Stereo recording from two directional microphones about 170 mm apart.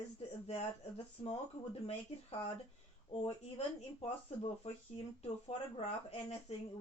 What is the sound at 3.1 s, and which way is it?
Speech, 35° left (ahead or behind).